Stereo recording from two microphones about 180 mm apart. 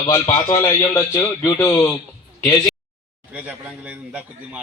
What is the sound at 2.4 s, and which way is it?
Speech, 5° left (ahead or behind).